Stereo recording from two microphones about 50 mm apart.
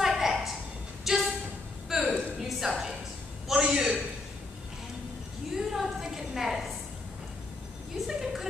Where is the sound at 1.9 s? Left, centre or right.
Centre.